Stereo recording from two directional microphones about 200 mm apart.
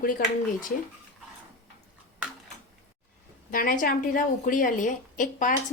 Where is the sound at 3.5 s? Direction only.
45° left (ahead or behind).